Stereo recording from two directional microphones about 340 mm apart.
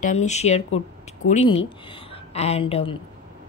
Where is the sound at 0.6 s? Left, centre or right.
Left.